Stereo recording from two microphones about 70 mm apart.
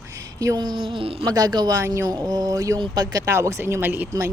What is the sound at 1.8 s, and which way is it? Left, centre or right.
Speech, right.